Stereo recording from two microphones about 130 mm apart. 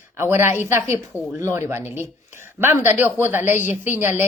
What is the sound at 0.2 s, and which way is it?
Speech, 20° right (ahead or behind).